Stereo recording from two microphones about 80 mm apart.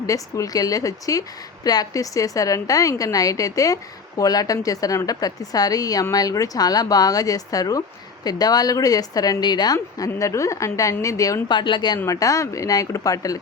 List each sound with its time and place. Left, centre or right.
0.0 s a woman's voice: left
10.2 s a woman's voice: left
11.4 s speech: left
12.0 s a woman's voice: left